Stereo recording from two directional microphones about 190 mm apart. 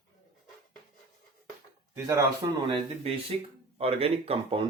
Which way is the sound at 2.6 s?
30° right (ahead or behind).